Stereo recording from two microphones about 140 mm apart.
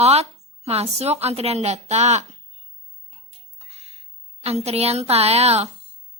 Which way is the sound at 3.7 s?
50° right (ahead or behind).